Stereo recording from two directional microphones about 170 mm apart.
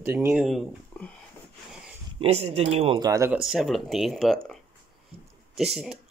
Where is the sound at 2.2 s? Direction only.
40° right (ahead or behind).